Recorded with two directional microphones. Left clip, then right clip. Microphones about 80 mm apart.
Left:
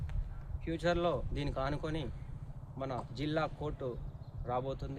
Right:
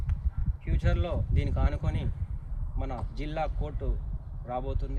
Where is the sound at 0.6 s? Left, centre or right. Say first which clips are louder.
Left 3 dB; left.